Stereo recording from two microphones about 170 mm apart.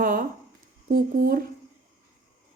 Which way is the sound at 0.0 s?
55° right (ahead or behind).